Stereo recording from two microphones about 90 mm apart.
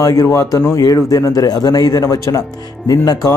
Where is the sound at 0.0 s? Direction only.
40° left (ahead or behind).